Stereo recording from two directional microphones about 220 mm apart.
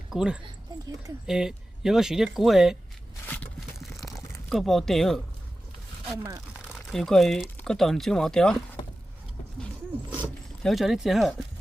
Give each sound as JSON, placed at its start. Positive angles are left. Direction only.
{"t": 0.1, "sound": "speech", "side_deg": 0}
{"t": 0.4, "sound": "speech", "side_deg": -15}
{"t": 1.3, "sound": "speech", "side_deg": 0}
{"t": 3.2, "sound": "a sound", "side_deg": 5}
{"t": 4.4, "sound": "speech", "side_deg": 0}
{"t": 6.7, "sound": "speech", "side_deg": 0}
{"t": 10.6, "sound": "speech", "side_deg": 0}